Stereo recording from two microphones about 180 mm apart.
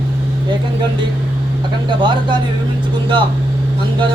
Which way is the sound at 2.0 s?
25° right (ahead or behind).